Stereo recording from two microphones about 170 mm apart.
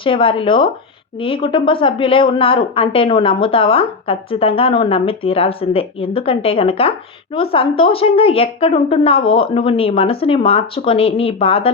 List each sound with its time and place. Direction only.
0.0 s a woman's voice: 30° left (ahead or behind)